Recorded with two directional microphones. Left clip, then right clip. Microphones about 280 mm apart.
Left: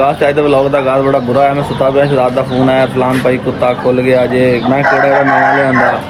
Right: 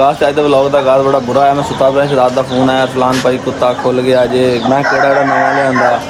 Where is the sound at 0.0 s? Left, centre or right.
Centre.